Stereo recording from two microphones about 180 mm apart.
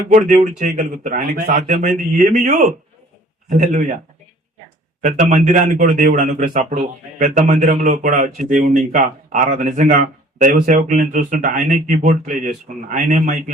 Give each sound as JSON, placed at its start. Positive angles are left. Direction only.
{"t": 0.1, "sound": "speech", "side_deg": -45}
{"t": 5.0, "sound": "a man's voice", "side_deg": -40}